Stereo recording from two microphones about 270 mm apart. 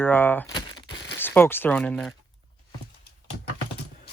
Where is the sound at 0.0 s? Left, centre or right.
Centre.